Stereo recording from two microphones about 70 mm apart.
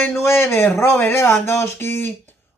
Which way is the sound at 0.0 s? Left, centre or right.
Left.